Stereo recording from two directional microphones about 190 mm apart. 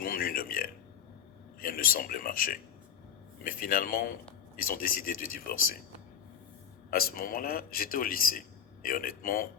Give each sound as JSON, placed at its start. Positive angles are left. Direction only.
{"t": 0.0, "sound": "a sound", "side_deg": 50}
{"t": 1.6, "sound": "a man's voice", "side_deg": 50}
{"t": 6.9, "sound": "a man's voice", "side_deg": 50}